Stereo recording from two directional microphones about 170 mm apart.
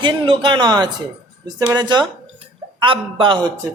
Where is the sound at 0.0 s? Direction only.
30° right (ahead or behind).